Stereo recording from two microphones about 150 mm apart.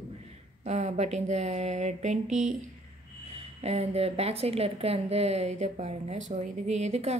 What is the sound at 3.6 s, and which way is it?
Speech, 45° right (ahead or behind).